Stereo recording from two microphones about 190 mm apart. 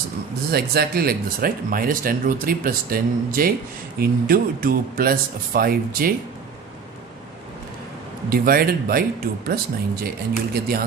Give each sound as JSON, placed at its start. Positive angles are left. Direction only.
{"t": 0.5, "sound": "speech", "side_deg": -55}
{"t": 8.3, "sound": "speech", "side_deg": -50}